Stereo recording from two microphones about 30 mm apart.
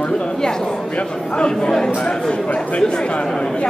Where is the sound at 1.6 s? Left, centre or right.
Centre.